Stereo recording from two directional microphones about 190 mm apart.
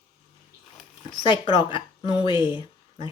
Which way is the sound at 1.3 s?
25° left (ahead or behind).